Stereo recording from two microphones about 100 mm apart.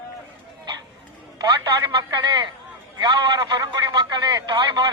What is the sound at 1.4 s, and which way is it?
Speech, 45° right (ahead or behind).